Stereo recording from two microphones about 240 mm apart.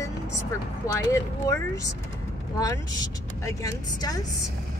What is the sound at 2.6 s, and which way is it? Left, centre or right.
Speech, centre.